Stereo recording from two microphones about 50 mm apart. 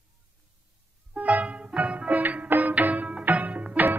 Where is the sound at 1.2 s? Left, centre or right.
Right.